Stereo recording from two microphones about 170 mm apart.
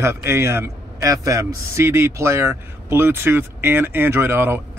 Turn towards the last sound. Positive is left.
turn(degrees=-15)  # may be behind; listen again after turning